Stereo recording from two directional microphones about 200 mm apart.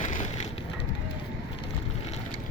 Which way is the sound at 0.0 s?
35° left (ahead or behind).